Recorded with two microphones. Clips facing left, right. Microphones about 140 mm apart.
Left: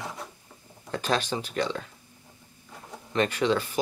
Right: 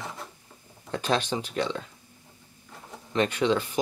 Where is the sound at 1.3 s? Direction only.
15° right (ahead or behind).